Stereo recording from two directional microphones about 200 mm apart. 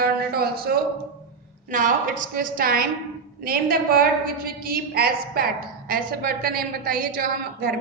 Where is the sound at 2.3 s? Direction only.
45° right (ahead or behind).